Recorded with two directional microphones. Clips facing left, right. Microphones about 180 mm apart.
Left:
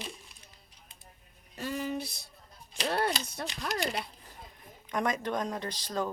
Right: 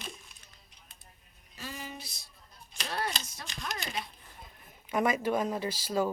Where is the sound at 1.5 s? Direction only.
60° left (ahead or behind).